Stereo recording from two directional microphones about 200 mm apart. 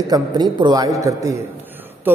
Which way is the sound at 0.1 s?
20° right (ahead or behind).